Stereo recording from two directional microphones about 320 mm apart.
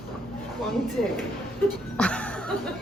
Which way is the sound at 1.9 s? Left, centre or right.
Centre.